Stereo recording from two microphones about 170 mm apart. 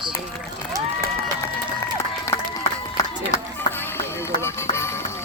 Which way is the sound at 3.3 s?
15° left (ahead or behind).